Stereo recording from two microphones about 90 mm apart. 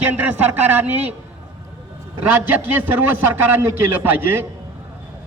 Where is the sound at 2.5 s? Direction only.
20° right (ahead or behind).